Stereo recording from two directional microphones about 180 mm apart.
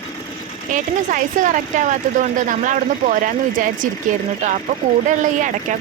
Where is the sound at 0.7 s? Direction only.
45° right (ahead or behind).